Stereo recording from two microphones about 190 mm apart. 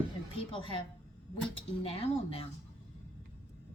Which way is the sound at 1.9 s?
30° left (ahead or behind).